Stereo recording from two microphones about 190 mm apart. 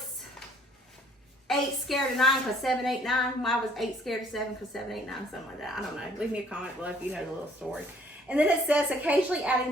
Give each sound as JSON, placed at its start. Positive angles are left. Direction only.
{"t": 1.5, "sound": "a woman's voice", "side_deg": 0}